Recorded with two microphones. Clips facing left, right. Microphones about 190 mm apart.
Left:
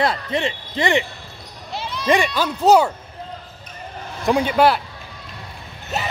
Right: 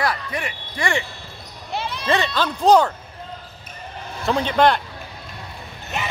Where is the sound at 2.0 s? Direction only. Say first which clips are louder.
Left 3 dB; 15° left (ahead or behind).